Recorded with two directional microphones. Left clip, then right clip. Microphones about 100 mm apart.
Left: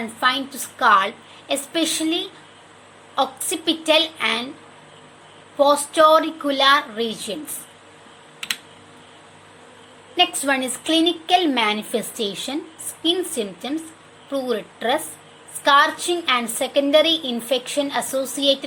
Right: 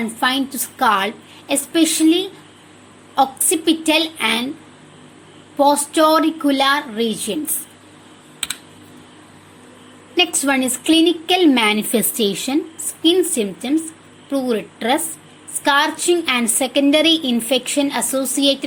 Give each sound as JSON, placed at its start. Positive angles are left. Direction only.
{"t": 0.2, "sound": "a woman's voice", "side_deg": -25}
{"t": 5.5, "sound": "a woman's voice", "side_deg": -20}
{"t": 10.4, "sound": "a woman's voice", "side_deg": -15}